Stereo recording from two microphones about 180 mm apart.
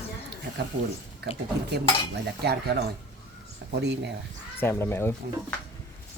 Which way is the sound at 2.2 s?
65° right (ahead or behind).